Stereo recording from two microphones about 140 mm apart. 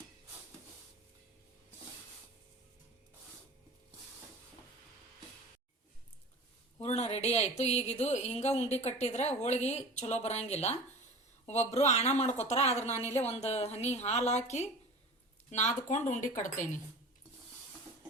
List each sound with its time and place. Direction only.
6.7 s speech: 50° left (ahead or behind); by 16.6 s 65° left (ahead or behind)